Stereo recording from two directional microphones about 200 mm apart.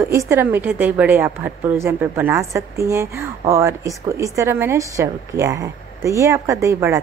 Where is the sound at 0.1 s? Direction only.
15° right (ahead or behind).